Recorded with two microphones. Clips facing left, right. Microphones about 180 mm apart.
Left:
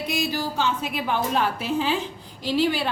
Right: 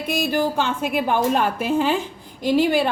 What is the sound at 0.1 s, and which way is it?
A woman's voice, 55° right (ahead or behind).